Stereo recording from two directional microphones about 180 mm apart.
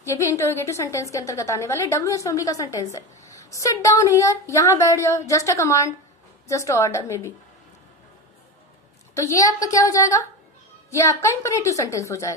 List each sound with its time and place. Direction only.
0.0 s a woman's voice: 15° left (ahead or behind)
9.1 s a woman's voice: 15° left (ahead or behind)